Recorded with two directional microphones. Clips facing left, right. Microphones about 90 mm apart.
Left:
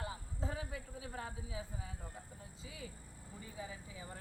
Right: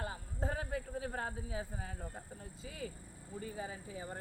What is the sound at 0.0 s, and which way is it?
A man's voice, 50° right (ahead or behind).